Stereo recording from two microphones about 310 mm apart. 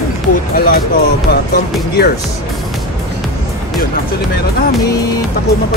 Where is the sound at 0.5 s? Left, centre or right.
Left.